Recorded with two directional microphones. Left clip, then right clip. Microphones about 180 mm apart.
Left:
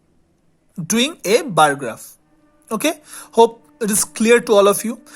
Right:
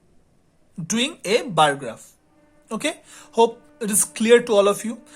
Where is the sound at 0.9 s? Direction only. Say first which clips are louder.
Left 5 dB; 30° left (ahead or behind).